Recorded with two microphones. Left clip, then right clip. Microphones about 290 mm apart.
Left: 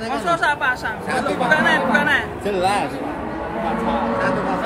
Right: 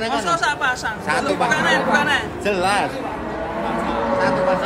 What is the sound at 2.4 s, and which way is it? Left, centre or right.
Speech, right.